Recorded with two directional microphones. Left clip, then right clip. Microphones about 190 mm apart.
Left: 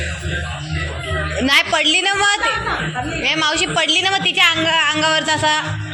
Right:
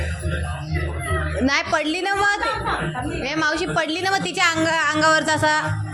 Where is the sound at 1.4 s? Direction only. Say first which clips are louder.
Left 6 dB; 10° right (ahead or behind).